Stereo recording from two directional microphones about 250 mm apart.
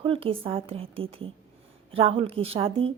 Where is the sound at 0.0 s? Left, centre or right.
Right.